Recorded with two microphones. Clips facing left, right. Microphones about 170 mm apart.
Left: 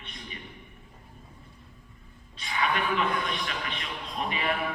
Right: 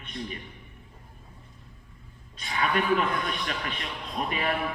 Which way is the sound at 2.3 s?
45° right (ahead or behind).